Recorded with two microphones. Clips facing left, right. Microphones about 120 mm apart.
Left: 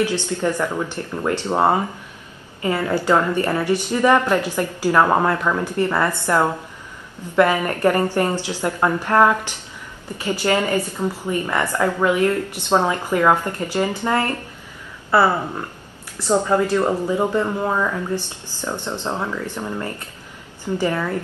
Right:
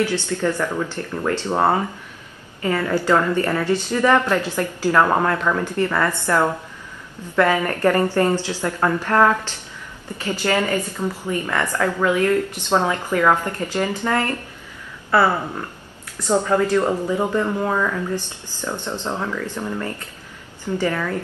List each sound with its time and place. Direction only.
0.0 s a woman's voice: 15° left (ahead or behind)
16.3 s a woman's voice: 15° left (ahead or behind)